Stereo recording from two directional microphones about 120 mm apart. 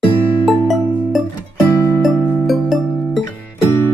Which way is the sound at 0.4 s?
Centre (ahead or behind).